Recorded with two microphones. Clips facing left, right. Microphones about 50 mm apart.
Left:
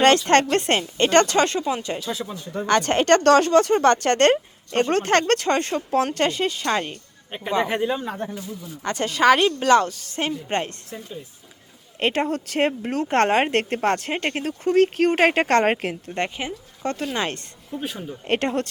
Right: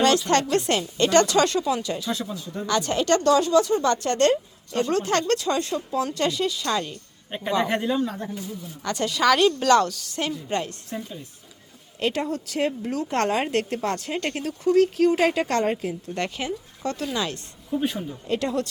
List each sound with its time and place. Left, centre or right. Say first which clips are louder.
0.5 s speech: left 2 dB; left
2.6 s speech: left 4 dB; left
7.3 s speech: left 1 dB; centre
8.0 s speech: left 1 dB; left
10.8 s a woman's voice: right 2 dB; centre
11.9 s speech: left 3 dB; left
16.0 s speech: even; left
17.7 s a woman's voice: right 5 dB; centre
18.3 s speech: left 3 dB; left